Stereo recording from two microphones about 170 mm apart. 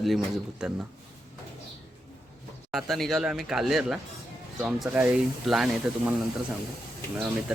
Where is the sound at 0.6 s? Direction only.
5° right (ahead or behind).